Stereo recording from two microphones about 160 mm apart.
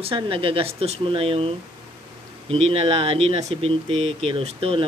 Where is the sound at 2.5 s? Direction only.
35° right (ahead or behind).